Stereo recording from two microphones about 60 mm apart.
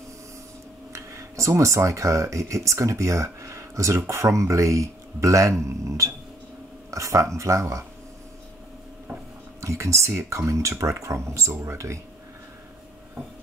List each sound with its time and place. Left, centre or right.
0.9 s speech: right
9.6 s speech: right
11.5 s speech: right